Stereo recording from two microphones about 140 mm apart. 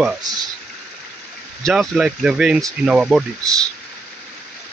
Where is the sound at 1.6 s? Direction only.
Centre (ahead or behind).